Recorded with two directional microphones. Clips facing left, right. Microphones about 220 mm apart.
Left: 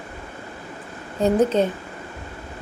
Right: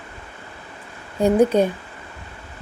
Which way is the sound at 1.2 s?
10° right (ahead or behind).